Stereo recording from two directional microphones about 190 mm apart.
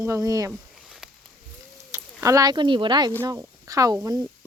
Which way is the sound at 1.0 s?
5° right (ahead or behind).